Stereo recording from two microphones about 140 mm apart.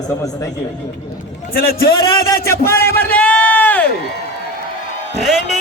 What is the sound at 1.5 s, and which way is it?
Speech, 90° left.